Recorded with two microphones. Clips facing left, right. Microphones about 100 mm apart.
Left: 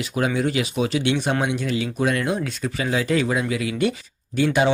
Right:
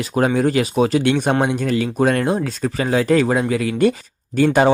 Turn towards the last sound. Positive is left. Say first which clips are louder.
# right 5 dB
turn(degrees=-45)  # may be behind; listen again after turning